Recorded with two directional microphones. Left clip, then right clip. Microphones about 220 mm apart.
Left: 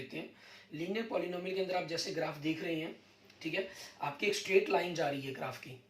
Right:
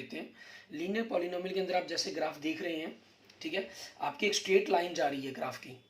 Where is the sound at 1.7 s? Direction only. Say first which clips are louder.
Right 3 dB; 50° right (ahead or behind).